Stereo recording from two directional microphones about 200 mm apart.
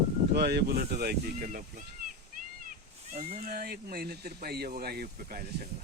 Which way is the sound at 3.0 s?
35° right (ahead or behind).